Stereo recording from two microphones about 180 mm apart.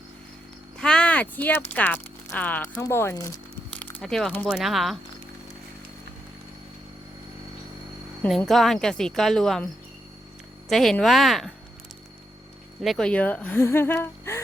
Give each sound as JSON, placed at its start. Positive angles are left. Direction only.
{"t": 0.8, "sound": "speech", "side_deg": 5}
{"t": 3.7, "sound": "a sound", "side_deg": 10}
{"t": 4.4, "sound": "speech", "side_deg": -5}
{"t": 8.2, "sound": "speech", "side_deg": 5}
{"t": 10.7, "sound": "speech", "side_deg": 0}
{"t": 12.8, "sound": "speech", "side_deg": 0}